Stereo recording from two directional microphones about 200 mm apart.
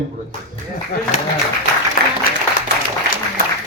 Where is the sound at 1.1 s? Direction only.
35° left (ahead or behind).